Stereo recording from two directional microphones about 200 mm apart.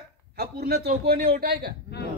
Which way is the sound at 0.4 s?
50° right (ahead or behind).